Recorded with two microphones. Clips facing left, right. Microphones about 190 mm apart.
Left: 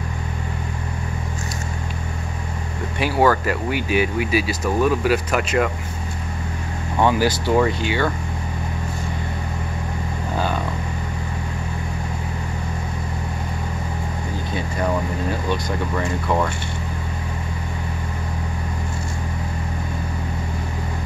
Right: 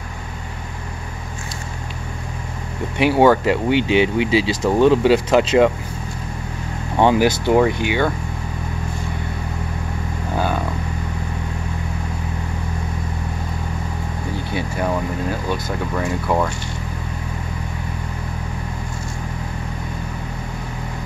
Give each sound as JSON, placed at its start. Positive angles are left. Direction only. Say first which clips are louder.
{"t": 3.0, "sound": "speech", "louder": "right 4 dB", "side_deg": -20}
{"t": 7.0, "sound": "speech", "louder": "right 3 dB", "side_deg": -20}
{"t": 15.5, "sound": "speech", "louder": "even", "side_deg": -5}